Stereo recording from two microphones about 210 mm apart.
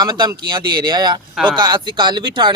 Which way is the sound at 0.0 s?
20° right (ahead or behind).